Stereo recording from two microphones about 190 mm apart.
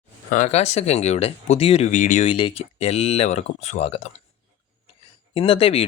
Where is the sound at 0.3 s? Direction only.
40° left (ahead or behind).